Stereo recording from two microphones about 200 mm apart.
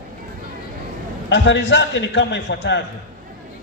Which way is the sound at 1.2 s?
65° left (ahead or behind).